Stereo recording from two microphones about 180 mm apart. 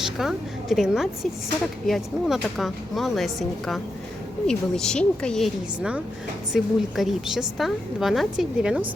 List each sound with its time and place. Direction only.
0.0 s a woman's voice: centre (ahead or behind)